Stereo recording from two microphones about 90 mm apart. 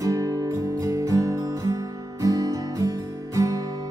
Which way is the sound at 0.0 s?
35° right (ahead or behind).